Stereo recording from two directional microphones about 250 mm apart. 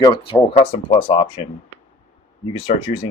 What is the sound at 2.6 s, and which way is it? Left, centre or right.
Speech, centre.